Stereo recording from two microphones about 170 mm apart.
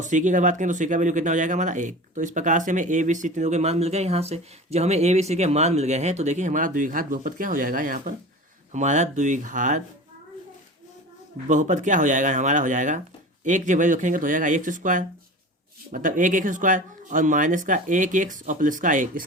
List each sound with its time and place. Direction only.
0.0 s speech: 45° right (ahead or behind)
11.4 s speech: 45° right (ahead or behind)